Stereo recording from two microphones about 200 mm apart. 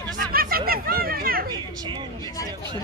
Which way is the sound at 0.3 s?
50° right (ahead or behind).